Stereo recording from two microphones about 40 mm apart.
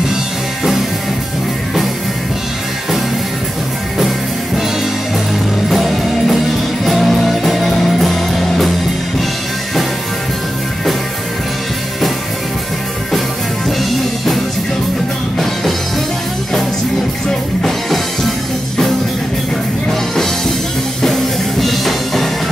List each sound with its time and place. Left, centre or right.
5.7 s music: centre
13.7 s music: centre
17.3 s music: centre
21.0 s music: centre